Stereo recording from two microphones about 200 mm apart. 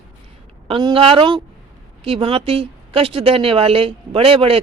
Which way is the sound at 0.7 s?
25° right (ahead or behind).